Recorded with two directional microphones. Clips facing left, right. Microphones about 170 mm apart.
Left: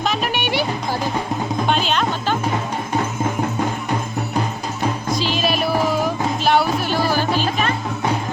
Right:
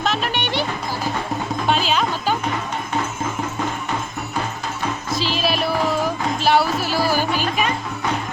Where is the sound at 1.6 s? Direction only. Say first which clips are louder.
Right 1 dB; centre (ahead or behind).